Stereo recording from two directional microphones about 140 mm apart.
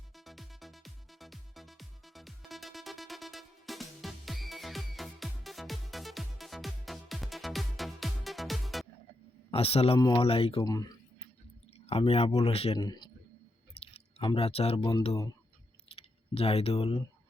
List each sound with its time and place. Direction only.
0.3 s music: centre (ahead or behind)
9.5 s speech: 45° left (ahead or behind)
10.6 s speech: 25° left (ahead or behind)
11.9 s speech: 45° left (ahead or behind)
12.7 s speech: 30° left (ahead or behind)
13.8 s speech: 40° left (ahead or behind)
16.0 s speech: 45° left (ahead or behind)